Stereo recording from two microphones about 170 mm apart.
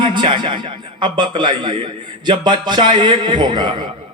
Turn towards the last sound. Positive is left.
turn(degrees=-25)  # may be behind; listen again after turning